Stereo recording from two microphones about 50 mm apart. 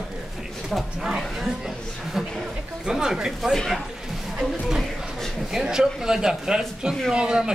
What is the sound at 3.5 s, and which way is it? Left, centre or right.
Speech, centre.